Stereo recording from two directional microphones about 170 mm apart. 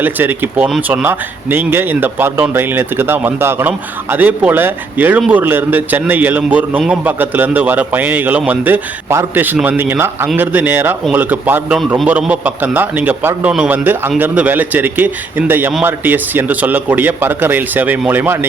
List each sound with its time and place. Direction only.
0.0 s speech: 10° right (ahead or behind)